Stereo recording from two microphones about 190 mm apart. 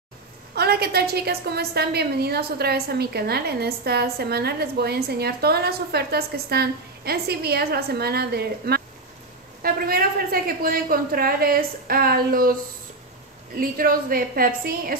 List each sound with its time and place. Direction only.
0.6 s a woman's voice: 55° right (ahead or behind)
13.6 s a woman's voice: 50° right (ahead or behind)